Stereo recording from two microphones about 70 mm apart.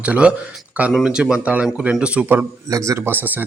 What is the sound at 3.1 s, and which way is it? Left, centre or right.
Speech, right.